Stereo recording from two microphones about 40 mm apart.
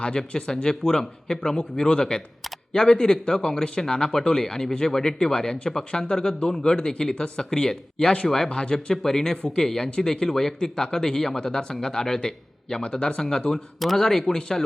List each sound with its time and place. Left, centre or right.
0.0 s speech: left